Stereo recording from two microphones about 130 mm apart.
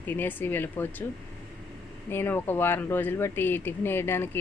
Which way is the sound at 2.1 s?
15° left (ahead or behind).